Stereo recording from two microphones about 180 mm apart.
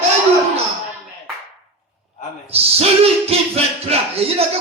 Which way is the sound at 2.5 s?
35° right (ahead or behind).